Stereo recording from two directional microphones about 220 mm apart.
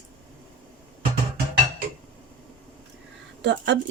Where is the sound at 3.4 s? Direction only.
50° right (ahead or behind).